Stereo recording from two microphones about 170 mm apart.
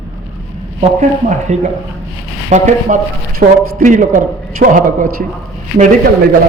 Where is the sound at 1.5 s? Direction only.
40° right (ahead or behind).